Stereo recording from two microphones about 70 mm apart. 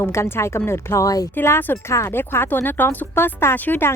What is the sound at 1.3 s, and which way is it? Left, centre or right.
Speech, left.